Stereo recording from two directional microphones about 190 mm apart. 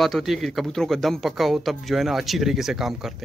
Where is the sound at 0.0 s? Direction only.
Centre (ahead or behind).